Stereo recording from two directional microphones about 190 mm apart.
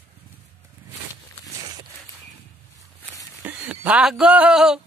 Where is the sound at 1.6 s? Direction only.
20° right (ahead or behind).